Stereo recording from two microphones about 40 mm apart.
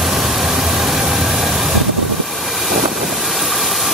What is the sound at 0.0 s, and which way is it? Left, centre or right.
Vehicle, centre.